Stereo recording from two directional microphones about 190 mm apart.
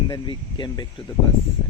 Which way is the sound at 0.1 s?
25° left (ahead or behind).